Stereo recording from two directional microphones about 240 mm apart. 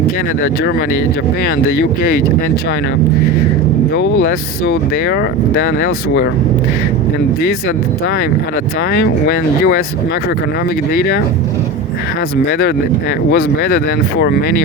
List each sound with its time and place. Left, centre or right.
3.9 s speech: left
8.9 s speech: left
12.5 s speech: left